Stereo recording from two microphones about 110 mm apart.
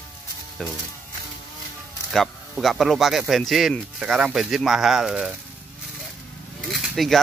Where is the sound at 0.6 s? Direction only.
5° left (ahead or behind).